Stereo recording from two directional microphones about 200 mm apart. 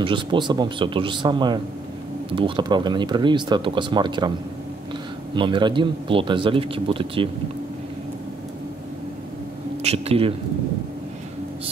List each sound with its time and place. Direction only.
0.0 s speech: 25° right (ahead or behind)
5.3 s speech: 25° right (ahead or behind)
9.8 s a sound: 30° right (ahead or behind)